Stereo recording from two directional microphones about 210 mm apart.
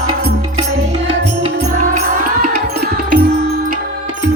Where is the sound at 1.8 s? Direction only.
40° right (ahead or behind).